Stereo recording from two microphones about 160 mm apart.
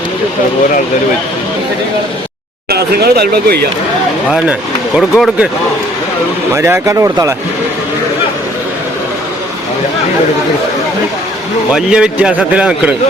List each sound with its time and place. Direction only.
2.6 s speech: 85° right
4.9 s speech: centre (ahead or behind)
6.5 s a man's voice: 15° right (ahead or behind)
11.7 s a man's voice: 5° right (ahead or behind)